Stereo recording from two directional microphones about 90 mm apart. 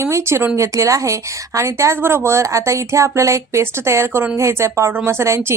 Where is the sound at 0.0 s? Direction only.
30° right (ahead or behind).